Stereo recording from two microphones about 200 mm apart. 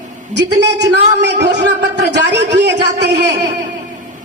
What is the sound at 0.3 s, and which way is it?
A man's voice, 60° right (ahead or behind).